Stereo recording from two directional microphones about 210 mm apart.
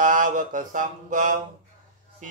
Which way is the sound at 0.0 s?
40° right (ahead or behind).